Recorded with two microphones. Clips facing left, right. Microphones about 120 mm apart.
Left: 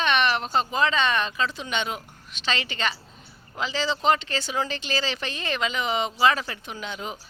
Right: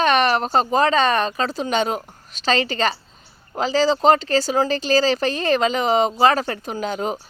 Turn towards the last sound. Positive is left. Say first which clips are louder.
# right 10 dB
turn(degrees=-40)  # may be behind; listen again after turning